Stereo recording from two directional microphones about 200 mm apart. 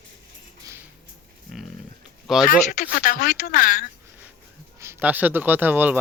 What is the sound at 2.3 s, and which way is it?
Speech, centre (ahead or behind).